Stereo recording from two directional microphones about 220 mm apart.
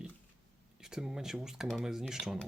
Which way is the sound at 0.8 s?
5° right (ahead or behind).